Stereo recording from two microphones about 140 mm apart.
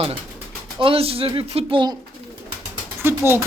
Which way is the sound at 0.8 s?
40° right (ahead or behind).